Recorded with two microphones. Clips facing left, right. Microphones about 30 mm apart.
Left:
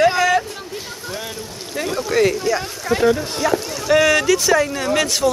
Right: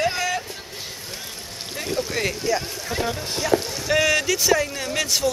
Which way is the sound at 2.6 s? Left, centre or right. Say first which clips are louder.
Left 6 dB; left.